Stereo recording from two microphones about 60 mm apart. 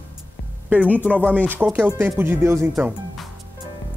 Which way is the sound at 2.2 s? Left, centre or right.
Right.